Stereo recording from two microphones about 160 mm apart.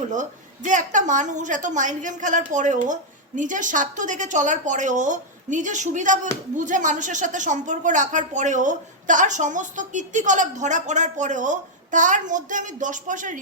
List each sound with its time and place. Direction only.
0.1 s a woman's voice: 50° right (ahead or behind)